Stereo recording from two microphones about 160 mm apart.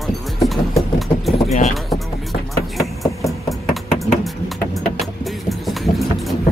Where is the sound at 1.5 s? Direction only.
50° left (ahead or behind).